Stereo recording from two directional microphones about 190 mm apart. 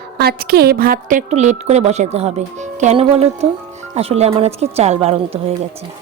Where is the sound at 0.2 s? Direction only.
55° right (ahead or behind).